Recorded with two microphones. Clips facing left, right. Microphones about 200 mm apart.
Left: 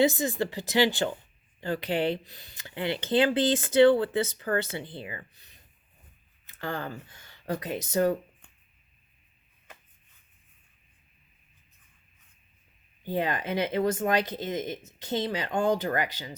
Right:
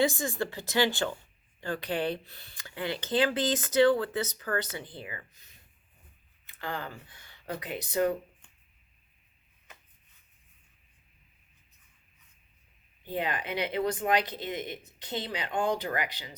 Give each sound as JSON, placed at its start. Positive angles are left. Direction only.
{"t": 0.0, "sound": "speech", "side_deg": 20}
{"t": 13.1, "sound": "speech", "side_deg": 40}